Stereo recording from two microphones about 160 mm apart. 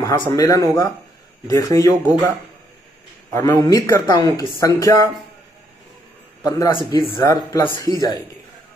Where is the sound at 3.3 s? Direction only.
20° left (ahead or behind).